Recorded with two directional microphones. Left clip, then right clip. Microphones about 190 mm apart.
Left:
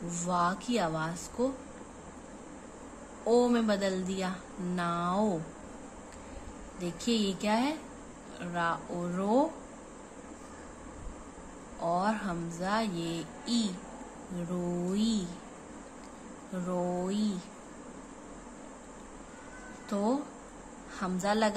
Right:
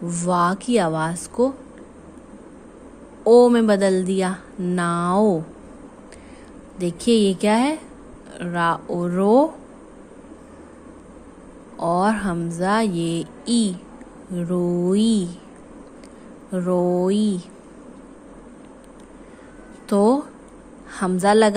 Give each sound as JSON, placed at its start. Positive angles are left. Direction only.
{"t": 0.1, "sound": "a woman's voice", "side_deg": -40}
{"t": 3.3, "sound": "a woman's voice", "side_deg": -40}
{"t": 6.8, "sound": "a woman's voice", "side_deg": -45}
{"t": 11.8, "sound": "a woman's voice", "side_deg": -45}
{"t": 14.9, "sound": "a woman's voice", "side_deg": -45}
{"t": 16.5, "sound": "a woman's voice", "side_deg": -45}
{"t": 19.9, "sound": "a woman's voice", "side_deg": -45}